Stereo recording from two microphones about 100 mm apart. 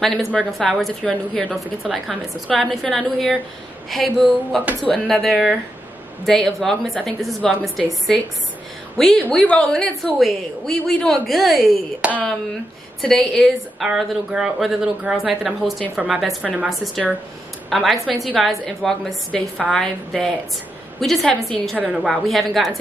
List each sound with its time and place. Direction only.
0.0 s a woman's voice: 5° left (ahead or behind)
8.9 s a woman's voice: 5° left (ahead or behind)
12.0 s speech: 10° right (ahead or behind)
13.0 s a woman's voice: centre (ahead or behind)